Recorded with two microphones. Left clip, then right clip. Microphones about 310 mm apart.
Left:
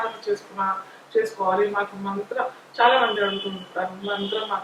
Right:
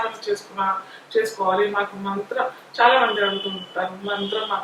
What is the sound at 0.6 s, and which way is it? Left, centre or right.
Speech, centre.